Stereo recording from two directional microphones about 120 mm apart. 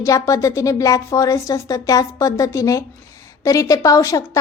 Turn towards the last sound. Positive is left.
turn(degrees=25)  # may be behind; listen again after turning